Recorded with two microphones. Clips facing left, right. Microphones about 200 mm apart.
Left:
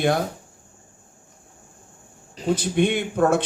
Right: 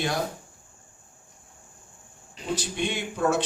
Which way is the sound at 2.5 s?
55° left (ahead or behind).